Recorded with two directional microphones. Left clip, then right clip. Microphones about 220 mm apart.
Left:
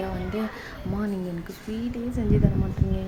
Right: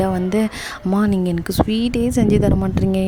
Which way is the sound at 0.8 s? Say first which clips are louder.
Right 12 dB; 45° right (ahead or behind).